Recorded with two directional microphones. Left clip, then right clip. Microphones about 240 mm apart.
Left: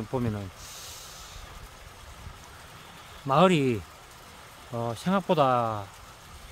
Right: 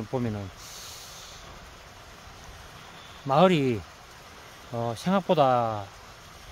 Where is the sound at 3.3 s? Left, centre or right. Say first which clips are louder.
Right 1 dB; centre.